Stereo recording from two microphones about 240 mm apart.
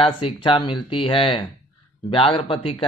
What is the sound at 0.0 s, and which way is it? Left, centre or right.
Speech, left.